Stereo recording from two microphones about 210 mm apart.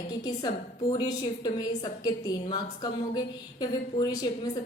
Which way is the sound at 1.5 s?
20° left (ahead or behind).